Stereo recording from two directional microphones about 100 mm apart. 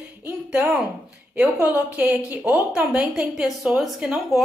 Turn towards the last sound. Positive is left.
turn(degrees=-5)  # may be behind; listen again after turning